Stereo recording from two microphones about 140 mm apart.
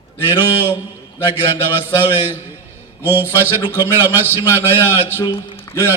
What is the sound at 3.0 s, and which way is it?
A man's voice, 15° right (ahead or behind).